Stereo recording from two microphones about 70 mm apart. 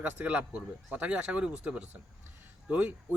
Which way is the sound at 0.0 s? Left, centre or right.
Right.